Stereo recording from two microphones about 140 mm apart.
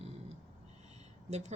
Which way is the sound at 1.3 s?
55° right (ahead or behind).